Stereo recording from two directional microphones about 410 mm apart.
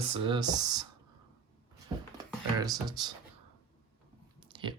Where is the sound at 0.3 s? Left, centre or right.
Centre.